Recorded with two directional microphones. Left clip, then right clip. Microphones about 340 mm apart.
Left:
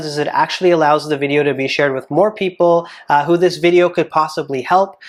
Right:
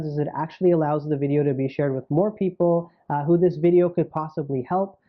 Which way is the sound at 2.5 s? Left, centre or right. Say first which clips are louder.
Left 9 dB; left.